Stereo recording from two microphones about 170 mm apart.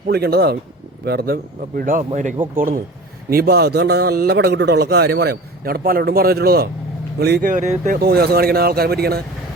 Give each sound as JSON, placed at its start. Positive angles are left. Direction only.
{"t": 0.1, "sound": "a man's voice", "side_deg": -65}
{"t": 3.2, "sound": "a man's voice", "side_deg": -65}
{"t": 7.5, "sound": "speech", "side_deg": -45}
{"t": 7.9, "sound": "a man's voice", "side_deg": -65}